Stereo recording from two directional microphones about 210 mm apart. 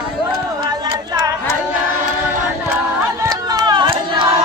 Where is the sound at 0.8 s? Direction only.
20° right (ahead or behind).